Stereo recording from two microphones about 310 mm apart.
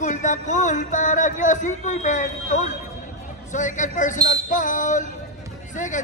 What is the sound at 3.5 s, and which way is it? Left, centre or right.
Speech, left.